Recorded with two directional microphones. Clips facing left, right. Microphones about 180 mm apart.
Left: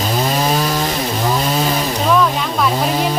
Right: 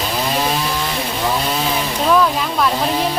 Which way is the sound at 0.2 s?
45° left (ahead or behind).